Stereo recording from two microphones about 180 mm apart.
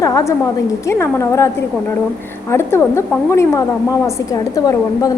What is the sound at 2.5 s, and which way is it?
A woman's voice, 15° left (ahead or behind).